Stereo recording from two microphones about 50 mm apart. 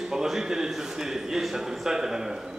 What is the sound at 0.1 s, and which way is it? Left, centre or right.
A man's voice, centre.